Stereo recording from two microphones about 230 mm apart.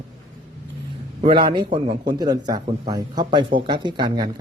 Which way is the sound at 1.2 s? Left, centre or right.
Right.